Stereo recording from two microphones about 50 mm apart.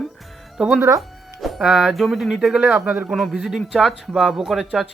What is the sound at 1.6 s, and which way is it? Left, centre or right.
Speech, centre.